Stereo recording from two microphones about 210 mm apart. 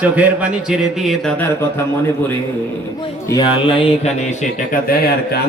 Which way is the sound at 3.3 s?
20° left (ahead or behind).